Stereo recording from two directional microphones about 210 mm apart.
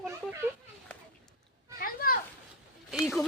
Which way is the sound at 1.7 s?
45° left (ahead or behind).